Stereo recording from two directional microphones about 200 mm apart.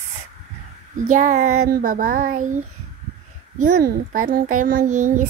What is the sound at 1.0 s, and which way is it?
A child's voice, 35° right (ahead or behind).